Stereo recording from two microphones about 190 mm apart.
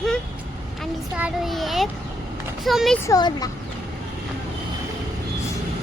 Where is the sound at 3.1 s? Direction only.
20° left (ahead or behind).